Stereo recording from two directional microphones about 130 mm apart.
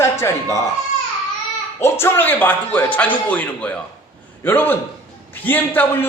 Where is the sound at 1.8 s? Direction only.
20° left (ahead or behind).